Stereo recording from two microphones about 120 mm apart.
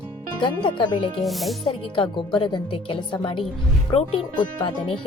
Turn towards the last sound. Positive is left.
turn(degrees=40)  # may be behind; listen again after turning